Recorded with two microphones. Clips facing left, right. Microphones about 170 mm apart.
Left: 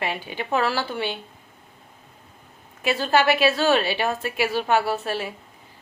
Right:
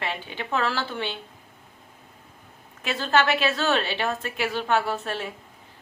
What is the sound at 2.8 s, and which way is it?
A woman's voice, 10° left (ahead or behind).